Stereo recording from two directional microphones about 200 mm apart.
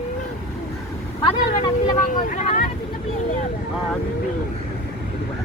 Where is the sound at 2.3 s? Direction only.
40° left (ahead or behind).